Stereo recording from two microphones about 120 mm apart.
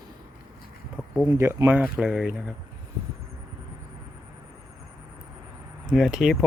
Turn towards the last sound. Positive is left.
turn(degrees=-5)  # may be behind; listen again after turning